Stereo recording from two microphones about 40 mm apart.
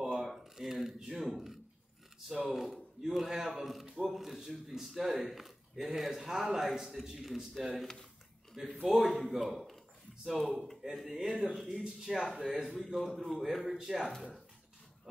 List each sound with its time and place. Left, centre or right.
0.1 s a man's voice: centre
7.5 s a man's voice: centre
13.7 s a man's voice: centre